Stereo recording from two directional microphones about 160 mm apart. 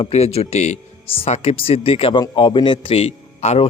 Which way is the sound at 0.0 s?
40° left (ahead or behind).